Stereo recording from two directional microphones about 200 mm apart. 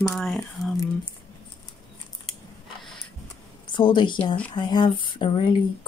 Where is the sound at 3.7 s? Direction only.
25° left (ahead or behind).